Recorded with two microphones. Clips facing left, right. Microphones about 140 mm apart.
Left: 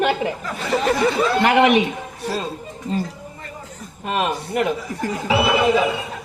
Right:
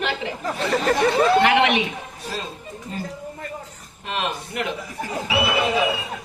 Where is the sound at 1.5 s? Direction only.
45° left (ahead or behind).